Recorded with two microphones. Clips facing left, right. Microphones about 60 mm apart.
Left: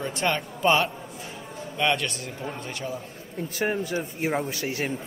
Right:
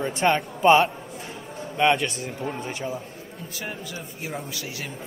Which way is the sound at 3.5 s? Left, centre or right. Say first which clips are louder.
Left 9 dB; left.